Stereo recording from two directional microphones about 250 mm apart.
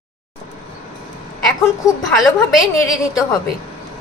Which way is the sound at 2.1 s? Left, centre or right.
Centre.